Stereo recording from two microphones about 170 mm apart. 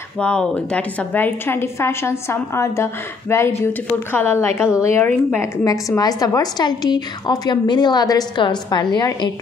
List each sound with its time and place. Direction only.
0.2 s a woman's voice: 5° left (ahead or behind); by 9.3 s 25° left (ahead or behind)